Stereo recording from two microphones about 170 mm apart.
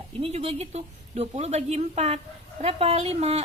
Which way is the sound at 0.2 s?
35° right (ahead or behind).